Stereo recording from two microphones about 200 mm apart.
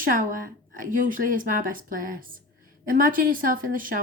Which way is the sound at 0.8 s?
45° right (ahead or behind).